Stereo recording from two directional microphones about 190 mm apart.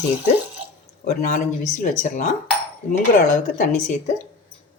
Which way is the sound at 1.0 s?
40° left (ahead or behind).